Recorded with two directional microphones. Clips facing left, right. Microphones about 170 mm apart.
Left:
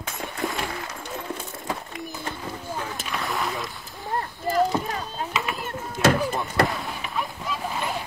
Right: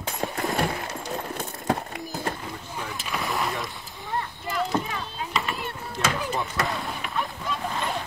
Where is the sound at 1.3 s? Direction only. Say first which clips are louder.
Right 4 dB; 60° right (ahead or behind).